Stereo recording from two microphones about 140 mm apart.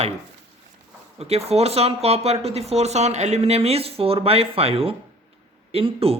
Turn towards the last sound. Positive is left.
turn(degrees=-45)  # may be behind; listen again after turning